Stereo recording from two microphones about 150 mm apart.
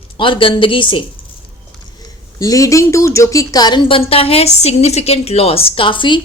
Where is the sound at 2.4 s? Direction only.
20° left (ahead or behind).